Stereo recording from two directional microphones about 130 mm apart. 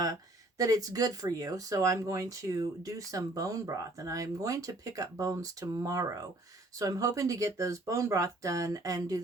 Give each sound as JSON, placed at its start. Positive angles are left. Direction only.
{"t": 0.6, "sound": "speech", "side_deg": -25}